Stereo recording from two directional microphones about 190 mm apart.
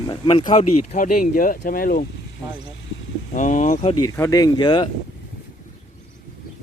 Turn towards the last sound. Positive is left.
turn(degrees=25)  # may be behind; listen again after turning